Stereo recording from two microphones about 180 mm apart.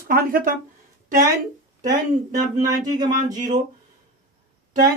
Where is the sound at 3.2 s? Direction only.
45° right (ahead or behind).